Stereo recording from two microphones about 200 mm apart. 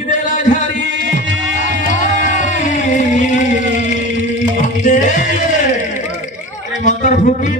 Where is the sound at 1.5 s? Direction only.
40° left (ahead or behind).